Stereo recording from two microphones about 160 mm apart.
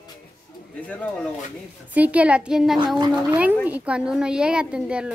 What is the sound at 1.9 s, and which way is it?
Speech, 10° right (ahead or behind).